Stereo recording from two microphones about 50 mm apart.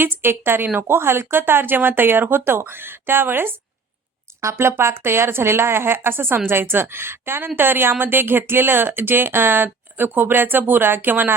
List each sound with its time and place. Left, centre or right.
0.0 s a woman's voice: right
4.3 s a sound: right
4.8 s a woman's voice: right